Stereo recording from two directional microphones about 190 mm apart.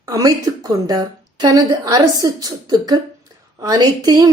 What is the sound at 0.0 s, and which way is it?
A woman's voice, 15° right (ahead or behind).